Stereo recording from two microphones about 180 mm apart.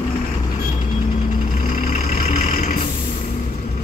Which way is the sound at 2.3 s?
50° left (ahead or behind).